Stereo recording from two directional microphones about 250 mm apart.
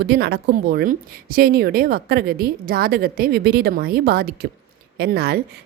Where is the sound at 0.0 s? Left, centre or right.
Right.